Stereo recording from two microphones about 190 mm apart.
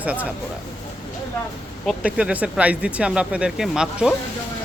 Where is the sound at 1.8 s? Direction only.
5° right (ahead or behind).